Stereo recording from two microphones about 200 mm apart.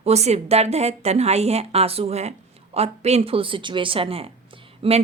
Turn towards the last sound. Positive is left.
turn(degrees=-30)  # may be behind; listen again after turning